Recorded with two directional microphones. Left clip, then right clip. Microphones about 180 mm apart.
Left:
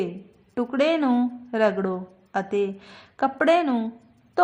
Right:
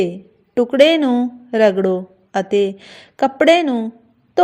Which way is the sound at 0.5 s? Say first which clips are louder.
Right 10 dB; 30° right (ahead or behind).